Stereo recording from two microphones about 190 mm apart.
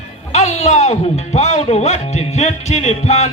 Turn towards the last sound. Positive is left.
turn(degrees=35)  # may be behind; listen again after turning